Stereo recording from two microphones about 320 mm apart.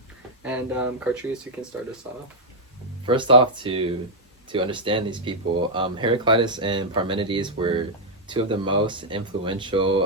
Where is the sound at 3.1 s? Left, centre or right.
Centre.